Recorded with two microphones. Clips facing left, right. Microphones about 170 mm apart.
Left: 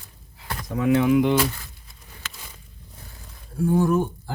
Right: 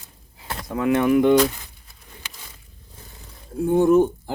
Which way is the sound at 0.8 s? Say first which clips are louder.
Right 1 dB; 60° right (ahead or behind).